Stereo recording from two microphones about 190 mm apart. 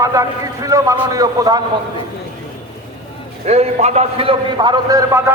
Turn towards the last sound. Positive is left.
turn(degrees=-20)  # may be behind; listen again after turning